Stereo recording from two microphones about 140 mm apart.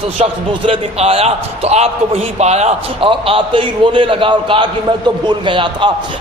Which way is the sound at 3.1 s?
40° right (ahead or behind).